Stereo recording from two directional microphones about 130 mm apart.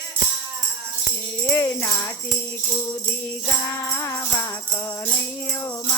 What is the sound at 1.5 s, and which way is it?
Jingle bell, 20° left (ahead or behind).